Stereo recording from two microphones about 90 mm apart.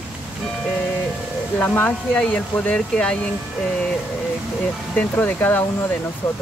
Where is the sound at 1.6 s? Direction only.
15° left (ahead or behind).